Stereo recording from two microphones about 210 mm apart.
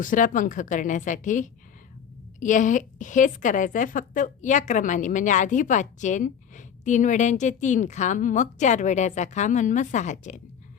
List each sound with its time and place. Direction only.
0.0 s a woman's voice: 40° left (ahead or behind)